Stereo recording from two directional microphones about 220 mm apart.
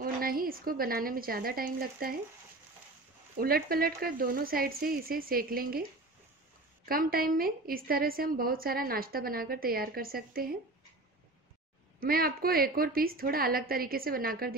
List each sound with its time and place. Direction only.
0.0 s a woman's voice: 40° right (ahead or behind)
3.3 s a woman's voice: 45° right (ahead or behind)
6.9 s a woman's voice: 40° right (ahead or behind)
12.0 s a woman's voice: 40° right (ahead or behind)